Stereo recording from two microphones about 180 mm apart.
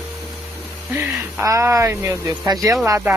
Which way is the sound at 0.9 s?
15° right (ahead or behind).